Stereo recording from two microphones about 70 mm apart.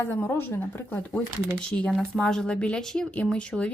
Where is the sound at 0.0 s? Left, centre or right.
Left.